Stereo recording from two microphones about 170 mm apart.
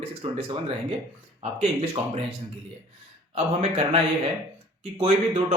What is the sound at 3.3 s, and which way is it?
A man's voice, 35° right (ahead or behind).